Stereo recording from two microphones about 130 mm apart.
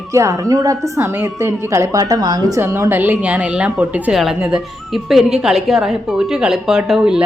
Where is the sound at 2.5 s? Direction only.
20° right (ahead or behind).